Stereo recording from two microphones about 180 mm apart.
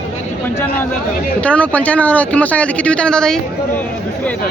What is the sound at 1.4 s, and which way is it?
Speech, 5° left (ahead or behind).